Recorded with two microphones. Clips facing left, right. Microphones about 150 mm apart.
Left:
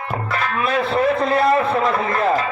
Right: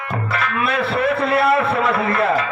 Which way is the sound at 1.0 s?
35° left (ahead or behind).